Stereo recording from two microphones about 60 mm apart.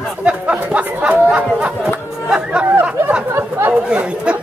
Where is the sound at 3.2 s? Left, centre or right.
Right.